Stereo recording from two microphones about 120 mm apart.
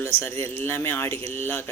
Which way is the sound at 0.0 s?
20° left (ahead or behind).